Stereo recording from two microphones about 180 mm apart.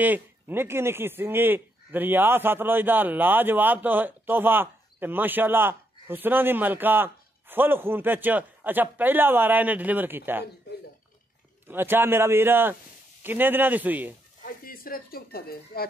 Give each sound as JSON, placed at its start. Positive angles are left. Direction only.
{"t": 0.0, "sound": "speech", "side_deg": -10}
{"t": 11.6, "sound": "speech", "side_deg": -10}
{"t": 14.4, "sound": "speech", "side_deg": 55}